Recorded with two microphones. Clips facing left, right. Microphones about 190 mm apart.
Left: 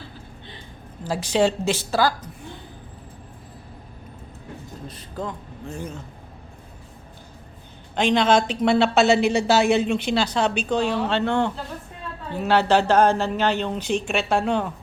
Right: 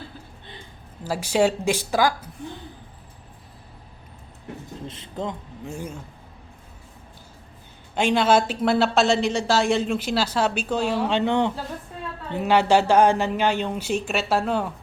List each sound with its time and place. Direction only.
1.0 s a woman's voice: 10° right (ahead or behind)
4.9 s a man's voice: 20° right (ahead or behind)
5.7 s a woman's voice: 10° right (ahead or behind)
7.9 s a woman's voice: 10° right (ahead or behind)